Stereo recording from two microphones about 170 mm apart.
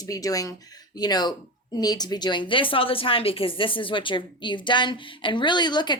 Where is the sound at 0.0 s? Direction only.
20° left (ahead or behind).